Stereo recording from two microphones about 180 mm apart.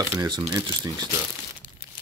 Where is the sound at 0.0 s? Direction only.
20° right (ahead or behind).